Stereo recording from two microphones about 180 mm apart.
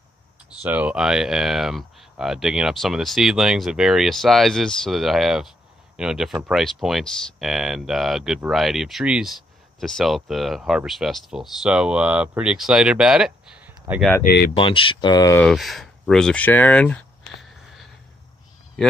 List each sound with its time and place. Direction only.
0.6 s speech: 10° right (ahead or behind)
14.2 s speech: 60° left (ahead or behind)
14.5 s speech: 30° left (ahead or behind)
15.4 s speech: centre (ahead or behind)